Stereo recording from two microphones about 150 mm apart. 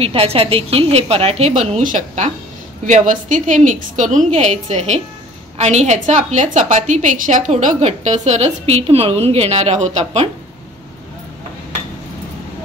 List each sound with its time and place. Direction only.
0.0 s a woman's voice: 40° right (ahead or behind)